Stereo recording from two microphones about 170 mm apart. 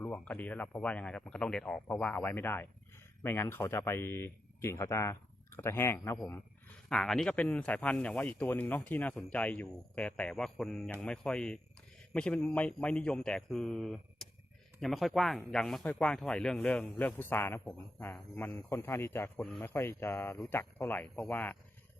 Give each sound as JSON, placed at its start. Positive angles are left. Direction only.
{"t": 0.0, "sound": "speech", "side_deg": 10}
{"t": 6.9, "sound": "speech", "side_deg": 5}
{"t": 19.4, "sound": "speech", "side_deg": 0}
{"t": 19.6, "sound": "speech", "side_deg": 15}